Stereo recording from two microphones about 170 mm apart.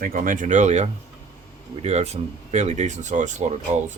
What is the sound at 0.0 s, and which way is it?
Speech, 55° right (ahead or behind).